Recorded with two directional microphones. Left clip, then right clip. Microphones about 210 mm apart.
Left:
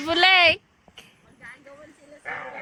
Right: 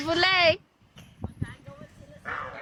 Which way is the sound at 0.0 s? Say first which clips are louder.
Left 5 dB; 10° right (ahead or behind).